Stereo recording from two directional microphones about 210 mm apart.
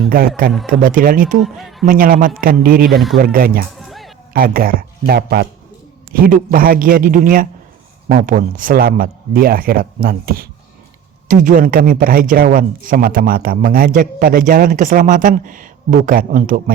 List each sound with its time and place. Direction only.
0.1 s a man's voice: 45° right (ahead or behind)
1.4 s speech: centre (ahead or behind)
1.9 s speech: 40° right (ahead or behind)
3.8 s music: centre (ahead or behind)
4.4 s a man's voice: 45° right (ahead or behind)